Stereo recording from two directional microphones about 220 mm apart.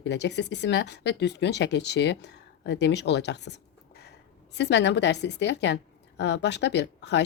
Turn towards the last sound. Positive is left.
turn(degrees=50)  # may be behind; listen again after turning